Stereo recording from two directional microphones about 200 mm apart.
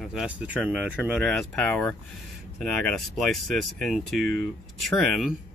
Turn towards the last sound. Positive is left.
turn(degrees=0)  # may be behind; listen again after turning